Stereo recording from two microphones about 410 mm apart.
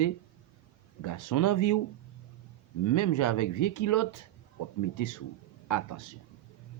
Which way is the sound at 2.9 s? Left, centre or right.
Left.